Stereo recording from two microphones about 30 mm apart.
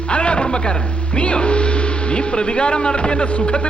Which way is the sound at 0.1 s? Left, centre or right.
Left.